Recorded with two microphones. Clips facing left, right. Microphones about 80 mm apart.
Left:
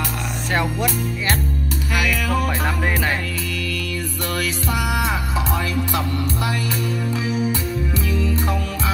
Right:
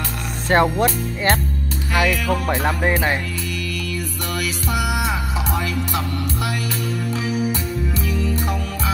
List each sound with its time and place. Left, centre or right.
0.5 s music: right
4.4 s music: centre
8.4 s music: left